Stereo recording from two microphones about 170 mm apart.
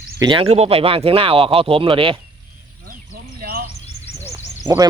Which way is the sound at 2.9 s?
55° right (ahead or behind).